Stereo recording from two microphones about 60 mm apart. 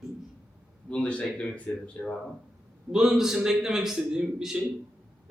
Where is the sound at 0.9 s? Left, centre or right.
Centre.